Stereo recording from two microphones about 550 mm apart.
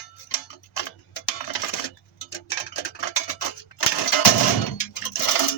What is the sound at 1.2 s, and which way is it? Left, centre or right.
Tick-tock, left.